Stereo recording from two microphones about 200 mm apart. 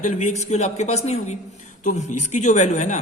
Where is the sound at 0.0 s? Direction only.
35° left (ahead or behind).